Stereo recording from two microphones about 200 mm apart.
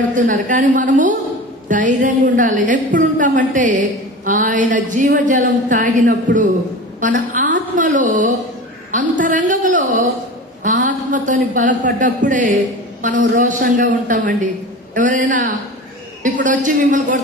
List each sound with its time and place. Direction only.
0.1 s a woman's voice: 40° right (ahead or behind)
7.3 s a sound: 40° right (ahead or behind)
8.9 s a woman's voice: 40° right (ahead or behind)